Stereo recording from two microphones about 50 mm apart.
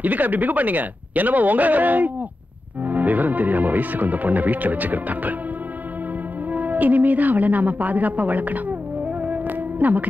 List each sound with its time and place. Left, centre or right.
0.0 s speech: right
6.5 s speech: right
9.2 s music: right